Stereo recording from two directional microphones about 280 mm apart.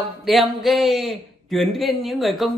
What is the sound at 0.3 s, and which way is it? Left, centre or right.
A man's voice, centre.